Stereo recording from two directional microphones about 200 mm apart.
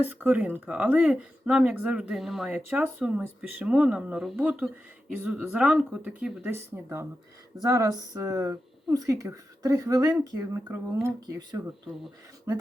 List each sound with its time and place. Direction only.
0.0 s speech: 10° right (ahead or behind)